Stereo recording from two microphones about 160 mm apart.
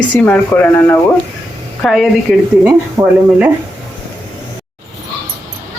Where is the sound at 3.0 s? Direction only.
20° right (ahead or behind).